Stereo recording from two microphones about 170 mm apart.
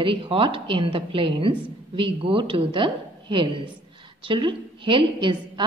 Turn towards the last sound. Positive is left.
turn(degrees=-30)  # may be behind; listen again after turning